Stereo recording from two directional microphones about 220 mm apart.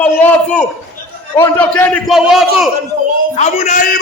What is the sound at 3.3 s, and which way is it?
Speech, 30° left (ahead or behind).